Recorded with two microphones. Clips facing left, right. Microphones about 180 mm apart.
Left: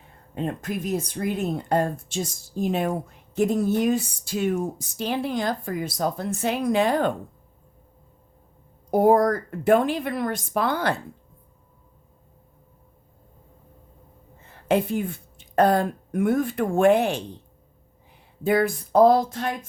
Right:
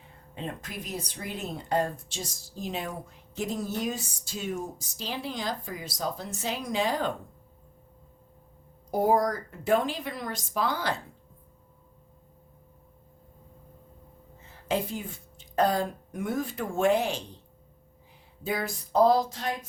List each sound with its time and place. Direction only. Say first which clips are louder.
0.3 s speech: left 9 dB; 50° left (ahead or behind)
8.9 s speech: left 6 dB; 55° left (ahead or behind)
14.4 s a woman's voice: left 7 dB; 60° left (ahead or behind)
18.4 s speech: left 10 dB; 55° left (ahead or behind)